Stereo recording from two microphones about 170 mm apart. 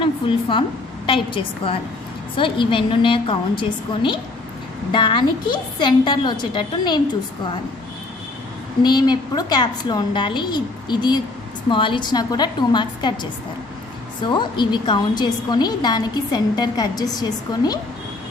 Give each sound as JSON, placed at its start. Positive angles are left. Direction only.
{"t": 0.0, "sound": "a woman's voice", "side_deg": 30}
{"t": 8.8, "sound": "a woman's voice", "side_deg": 25}
{"t": 14.2, "sound": "a woman's voice", "side_deg": 25}